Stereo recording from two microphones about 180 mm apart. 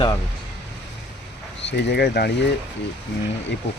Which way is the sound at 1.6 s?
70° left (ahead or behind).